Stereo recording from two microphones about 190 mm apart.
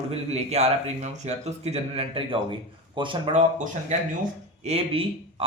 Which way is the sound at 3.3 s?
40° right (ahead or behind).